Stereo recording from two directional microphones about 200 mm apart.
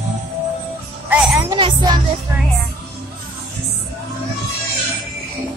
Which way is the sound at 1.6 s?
20° right (ahead or behind).